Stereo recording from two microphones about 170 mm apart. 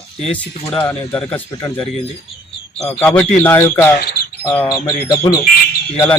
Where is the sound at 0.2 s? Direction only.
5° left (ahead or behind).